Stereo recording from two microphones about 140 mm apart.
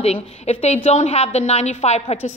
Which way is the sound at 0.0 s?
45° left (ahead or behind).